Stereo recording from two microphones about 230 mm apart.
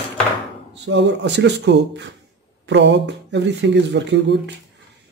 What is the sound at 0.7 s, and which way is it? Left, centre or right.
Speech, right.